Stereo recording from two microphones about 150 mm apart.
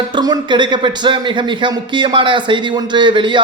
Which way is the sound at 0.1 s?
30° right (ahead or behind).